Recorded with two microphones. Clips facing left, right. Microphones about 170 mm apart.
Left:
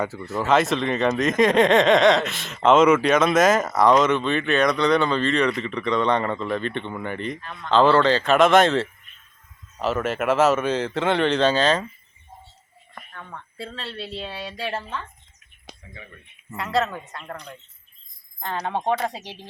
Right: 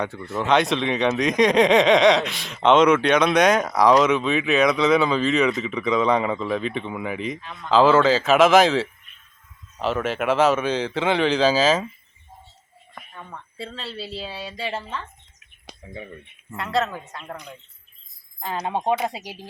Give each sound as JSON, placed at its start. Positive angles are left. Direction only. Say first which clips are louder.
{"t": 0.0, "sound": "speech", "louder": "even", "side_deg": 5}
{"t": 13.1, "sound": "speech", "louder": "even", "side_deg": 0}
{"t": 15.8, "sound": "speech", "louder": "right 10 dB", "side_deg": -30}
{"t": 16.5, "sound": "speech", "louder": "even", "side_deg": 0}
{"t": 18.6, "sound": "speech", "louder": "right 1 dB", "side_deg": -15}